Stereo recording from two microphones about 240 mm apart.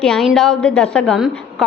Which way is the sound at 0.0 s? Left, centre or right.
Centre.